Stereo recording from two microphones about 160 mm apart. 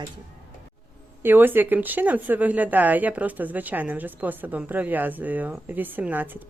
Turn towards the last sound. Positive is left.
turn(degrees=-10)  # may be behind; listen again after turning